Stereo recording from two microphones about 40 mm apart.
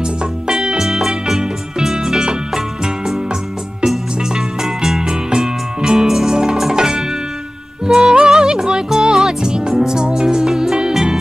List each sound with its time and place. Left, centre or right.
0.0 s music: centre
4.2 s music: centre
5.0 s music: centre